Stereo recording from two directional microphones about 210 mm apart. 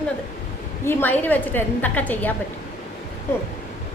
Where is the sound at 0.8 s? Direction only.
10° left (ahead or behind).